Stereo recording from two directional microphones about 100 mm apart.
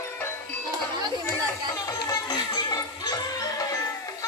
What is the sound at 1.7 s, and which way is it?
Music, 35° left (ahead or behind).